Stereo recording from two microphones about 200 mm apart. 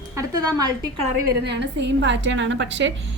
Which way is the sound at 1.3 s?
60° right (ahead or behind).